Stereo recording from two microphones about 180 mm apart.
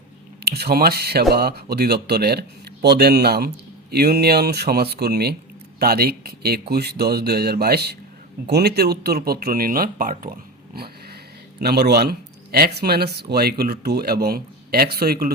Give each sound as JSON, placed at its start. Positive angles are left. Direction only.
{"t": 0.4, "sound": "speech", "side_deg": -60}
{"t": 10.8, "sound": "a sound", "side_deg": -60}
{"t": 11.6, "sound": "speech", "side_deg": -65}